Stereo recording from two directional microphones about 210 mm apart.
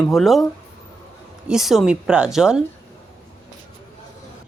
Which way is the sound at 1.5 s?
Centre (ahead or behind).